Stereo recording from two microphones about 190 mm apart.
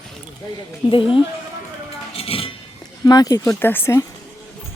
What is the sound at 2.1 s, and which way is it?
Chink, 30° left (ahead or behind).